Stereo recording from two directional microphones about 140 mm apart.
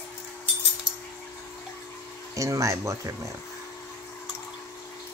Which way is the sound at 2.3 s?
25° right (ahead or behind).